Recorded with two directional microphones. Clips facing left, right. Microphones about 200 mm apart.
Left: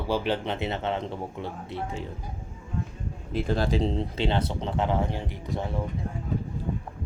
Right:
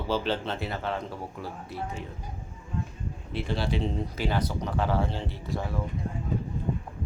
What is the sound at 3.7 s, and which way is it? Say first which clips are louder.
Speech: left 3 dB; 30° left (ahead or behind).